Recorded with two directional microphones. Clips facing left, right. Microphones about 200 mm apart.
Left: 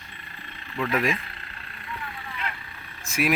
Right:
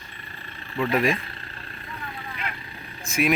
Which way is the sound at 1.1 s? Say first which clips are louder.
Right 3 dB; 35° right (ahead or behind).